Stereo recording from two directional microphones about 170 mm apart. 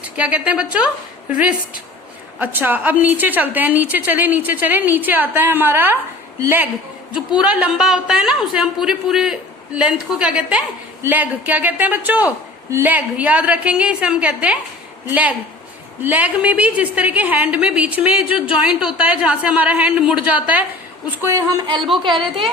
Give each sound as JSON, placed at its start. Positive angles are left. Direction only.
{"t": 0.2, "sound": "a woman's voice", "side_deg": -5}
{"t": 16.0, "sound": "a woman's voice", "side_deg": -10}